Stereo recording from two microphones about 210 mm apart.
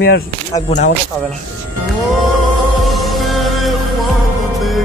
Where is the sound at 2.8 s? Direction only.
Centre (ahead or behind).